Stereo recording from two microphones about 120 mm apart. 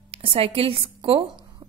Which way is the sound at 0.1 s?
50° right (ahead or behind).